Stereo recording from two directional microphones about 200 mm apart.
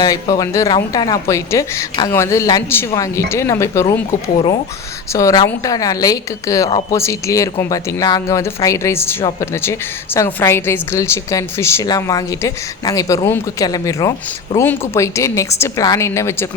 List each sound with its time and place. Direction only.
0.0 s a woman's voice: 20° left (ahead or behind)
5.1 s a woman's voice: 15° left (ahead or behind)